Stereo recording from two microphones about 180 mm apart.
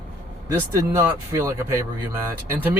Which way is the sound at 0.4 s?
15° right (ahead or behind).